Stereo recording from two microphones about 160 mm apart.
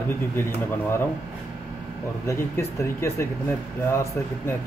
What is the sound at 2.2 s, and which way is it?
A man's voice, 15° left (ahead or behind).